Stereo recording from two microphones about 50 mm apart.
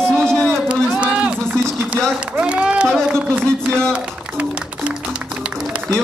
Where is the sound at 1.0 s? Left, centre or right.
Right.